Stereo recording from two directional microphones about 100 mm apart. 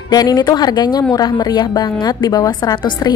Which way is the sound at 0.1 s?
40° left (ahead or behind).